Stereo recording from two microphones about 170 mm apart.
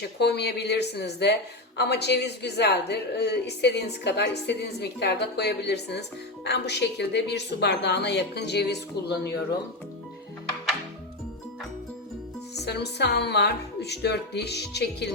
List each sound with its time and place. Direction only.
0.0 s speech: 80° left
12.5 s speech: 75° left (ahead or behind)